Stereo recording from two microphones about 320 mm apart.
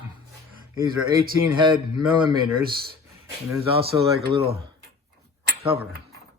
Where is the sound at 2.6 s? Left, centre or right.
Right.